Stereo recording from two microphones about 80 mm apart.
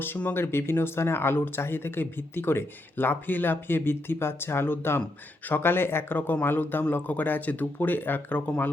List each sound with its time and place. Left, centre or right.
0.0 s speech: left